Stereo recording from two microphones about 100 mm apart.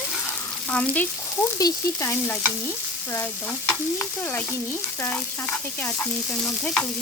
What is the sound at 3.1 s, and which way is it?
Frying, 15° left (ahead or behind).